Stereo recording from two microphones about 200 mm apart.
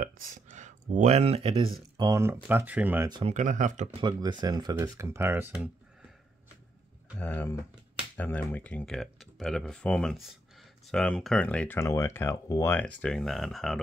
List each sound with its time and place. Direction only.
0.0 s speech: 40° right (ahead or behind)
2.0 s speech: 15° right (ahead or behind)
3.1 s speech: 25° right (ahead or behind)
3.3 s speech: 40° right (ahead or behind)
4.0 s speech: 20° right (ahead or behind)
7.2 s speech: 10° left (ahead or behind)